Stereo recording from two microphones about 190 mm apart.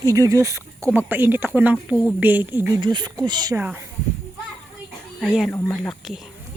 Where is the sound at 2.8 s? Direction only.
25° right (ahead or behind).